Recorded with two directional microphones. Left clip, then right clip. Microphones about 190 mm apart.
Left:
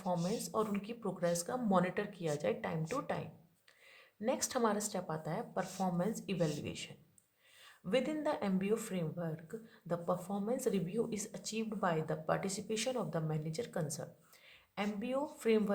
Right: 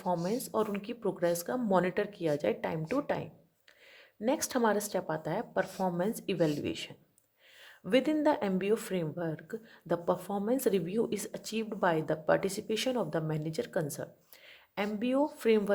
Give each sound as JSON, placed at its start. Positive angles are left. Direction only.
{"t": 0.3, "sound": "speech", "side_deg": -30}